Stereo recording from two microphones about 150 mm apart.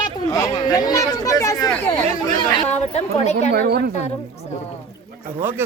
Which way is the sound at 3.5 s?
90° right.